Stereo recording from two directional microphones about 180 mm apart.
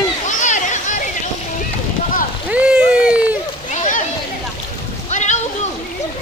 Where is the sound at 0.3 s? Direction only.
45° left (ahead or behind).